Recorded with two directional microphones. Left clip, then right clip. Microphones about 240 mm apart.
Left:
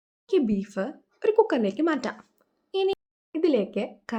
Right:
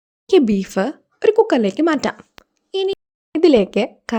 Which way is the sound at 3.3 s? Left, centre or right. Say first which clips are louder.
Right 11 dB; right.